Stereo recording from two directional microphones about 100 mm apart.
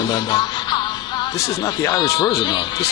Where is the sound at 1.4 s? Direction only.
35° left (ahead or behind).